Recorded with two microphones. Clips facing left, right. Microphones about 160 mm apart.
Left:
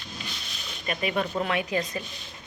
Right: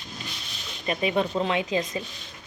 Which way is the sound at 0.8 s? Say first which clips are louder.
Right 3 dB; 25° right (ahead or behind).